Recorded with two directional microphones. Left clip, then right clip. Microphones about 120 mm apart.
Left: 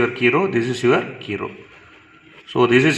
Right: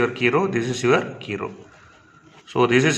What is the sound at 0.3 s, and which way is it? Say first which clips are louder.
Speech: left 4 dB; 30° left (ahead or behind).